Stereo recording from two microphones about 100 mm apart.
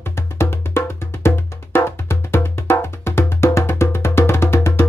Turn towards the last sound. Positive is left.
turn(degrees=25)  # may be behind; listen again after turning